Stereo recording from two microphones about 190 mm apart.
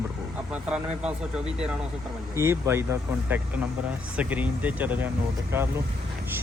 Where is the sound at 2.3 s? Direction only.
15° right (ahead or behind).